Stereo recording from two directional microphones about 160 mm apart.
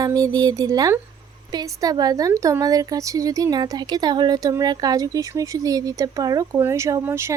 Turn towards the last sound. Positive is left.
turn(degrees=-15)  # may be behind; listen again after turning